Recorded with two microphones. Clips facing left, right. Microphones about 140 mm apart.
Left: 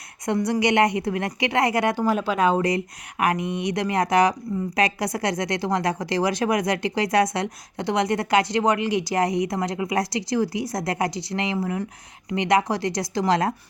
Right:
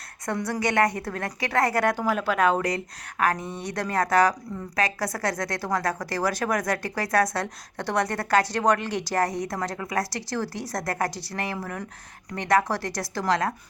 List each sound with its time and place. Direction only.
0.3 s speech: 20° left (ahead or behind)